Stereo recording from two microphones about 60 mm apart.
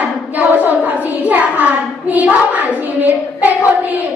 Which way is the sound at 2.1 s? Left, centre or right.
Right.